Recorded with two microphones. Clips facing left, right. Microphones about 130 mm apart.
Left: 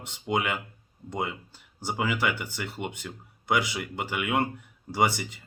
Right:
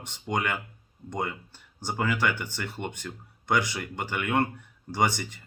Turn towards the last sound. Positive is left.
turn(degrees=5)  # may be behind; listen again after turning